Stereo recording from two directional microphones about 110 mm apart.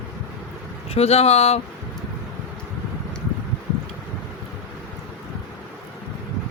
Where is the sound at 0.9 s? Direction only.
65° left (ahead or behind).